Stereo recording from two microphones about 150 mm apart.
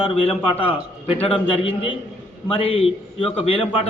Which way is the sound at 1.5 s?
35° left (ahead or behind).